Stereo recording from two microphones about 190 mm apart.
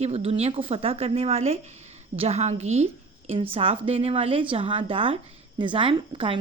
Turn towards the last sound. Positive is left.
turn(degrees=-30)  # may be behind; listen again after turning